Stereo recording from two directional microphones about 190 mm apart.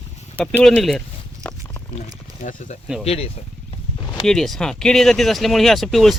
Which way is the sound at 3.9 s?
20° left (ahead or behind).